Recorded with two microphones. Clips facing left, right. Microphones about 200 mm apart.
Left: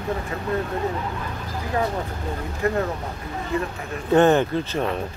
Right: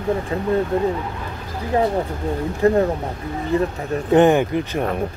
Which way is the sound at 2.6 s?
35° right (ahead or behind).